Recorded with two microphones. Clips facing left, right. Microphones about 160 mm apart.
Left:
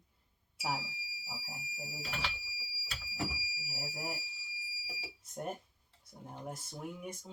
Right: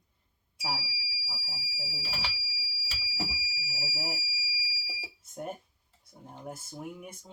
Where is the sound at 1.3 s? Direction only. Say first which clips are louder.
Left 1 dB; 20° left (ahead or behind).